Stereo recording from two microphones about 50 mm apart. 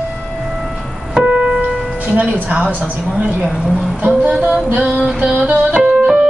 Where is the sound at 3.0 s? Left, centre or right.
Right.